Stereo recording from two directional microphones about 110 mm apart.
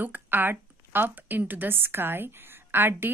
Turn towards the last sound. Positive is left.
turn(degrees=-20)  # may be behind; listen again after turning